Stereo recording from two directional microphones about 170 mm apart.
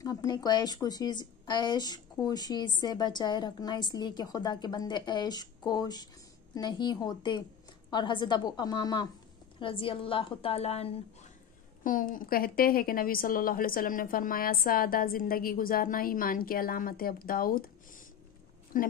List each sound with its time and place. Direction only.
0.0 s a woman's voice: 20° left (ahead or behind); by 10.9 s 35° left (ahead or behind)
11.8 s a woman's voice: 55° left (ahead or behind)